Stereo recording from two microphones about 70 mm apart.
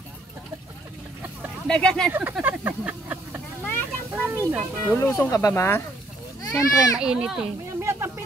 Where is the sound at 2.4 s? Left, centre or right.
Right.